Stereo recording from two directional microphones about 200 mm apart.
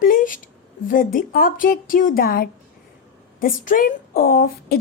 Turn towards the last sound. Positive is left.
turn(degrees=45)  # may be behind; listen again after turning